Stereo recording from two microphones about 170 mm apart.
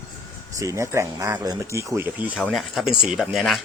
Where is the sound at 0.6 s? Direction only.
20° right (ahead or behind).